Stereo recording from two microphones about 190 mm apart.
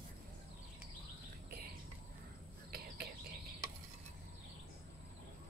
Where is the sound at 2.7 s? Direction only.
55° right (ahead or behind).